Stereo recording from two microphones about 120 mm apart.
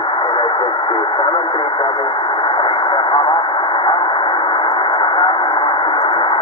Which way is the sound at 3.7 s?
40° left (ahead or behind).